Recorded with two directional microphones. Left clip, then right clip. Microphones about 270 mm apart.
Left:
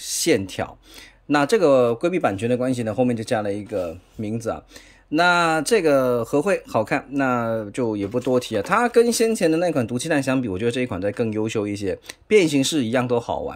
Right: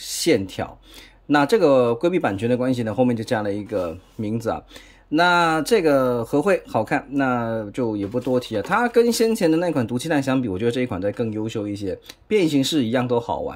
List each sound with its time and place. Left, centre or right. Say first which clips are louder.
0.0 s speech: even; centre